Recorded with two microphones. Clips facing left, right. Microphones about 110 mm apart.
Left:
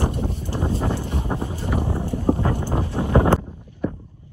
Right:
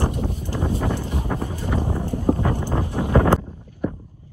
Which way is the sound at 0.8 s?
15° left (ahead or behind).